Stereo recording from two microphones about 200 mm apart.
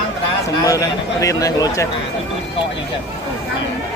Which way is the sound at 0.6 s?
15° left (ahead or behind).